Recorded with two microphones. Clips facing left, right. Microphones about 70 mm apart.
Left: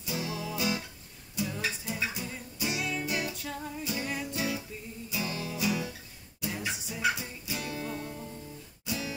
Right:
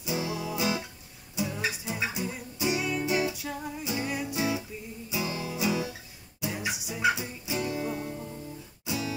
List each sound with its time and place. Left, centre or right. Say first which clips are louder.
0.0 s music: right 3 dB; centre